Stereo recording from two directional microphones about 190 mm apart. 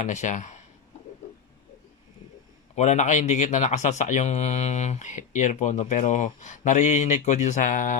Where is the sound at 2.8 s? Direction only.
40° left (ahead or behind).